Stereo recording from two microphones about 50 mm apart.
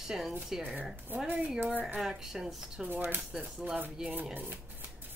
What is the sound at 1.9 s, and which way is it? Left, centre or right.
Speech, centre.